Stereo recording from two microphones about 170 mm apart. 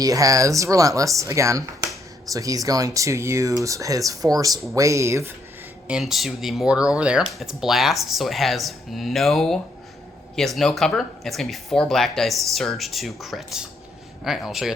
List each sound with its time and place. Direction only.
0.0 s speech: 20° right (ahead or behind)
5.9 s speech: centre (ahead or behind)